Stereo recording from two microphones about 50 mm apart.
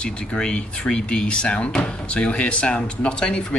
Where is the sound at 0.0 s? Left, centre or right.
Left.